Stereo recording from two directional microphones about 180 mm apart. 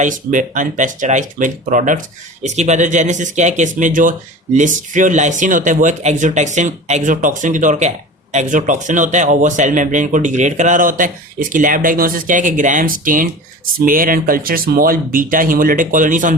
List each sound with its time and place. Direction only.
0.0 s speech: 45° right (ahead or behind)